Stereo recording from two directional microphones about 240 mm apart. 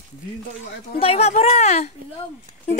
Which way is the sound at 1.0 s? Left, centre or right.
Left.